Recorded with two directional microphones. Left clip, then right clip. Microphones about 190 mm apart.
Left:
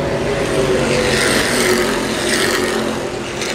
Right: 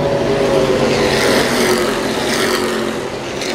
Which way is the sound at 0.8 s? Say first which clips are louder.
Right 2 dB; 55° right (ahead or behind).